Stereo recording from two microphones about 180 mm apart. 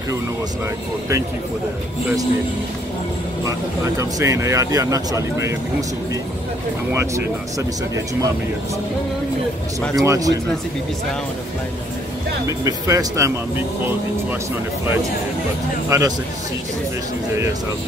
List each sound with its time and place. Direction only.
3.4 s speech: 20° right (ahead or behind)
6.9 s speech: 15° right (ahead or behind)
9.9 s speech: 20° right (ahead or behind)
12.4 s speech: 20° right (ahead or behind)
15.9 s speech: 20° right (ahead or behind)